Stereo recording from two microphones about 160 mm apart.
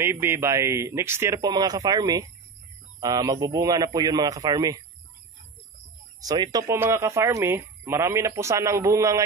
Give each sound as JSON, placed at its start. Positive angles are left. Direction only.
{"t": 0.0, "sound": "speech", "side_deg": -15}
{"t": 6.2, "sound": "speech", "side_deg": -25}